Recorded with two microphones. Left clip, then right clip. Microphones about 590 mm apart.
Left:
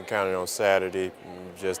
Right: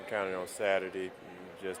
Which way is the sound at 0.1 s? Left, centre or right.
Left.